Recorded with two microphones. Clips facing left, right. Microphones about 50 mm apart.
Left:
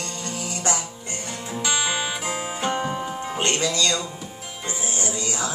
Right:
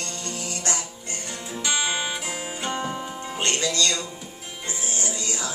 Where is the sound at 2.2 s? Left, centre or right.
Centre.